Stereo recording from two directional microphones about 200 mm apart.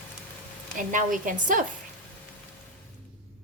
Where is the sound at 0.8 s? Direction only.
40° right (ahead or behind).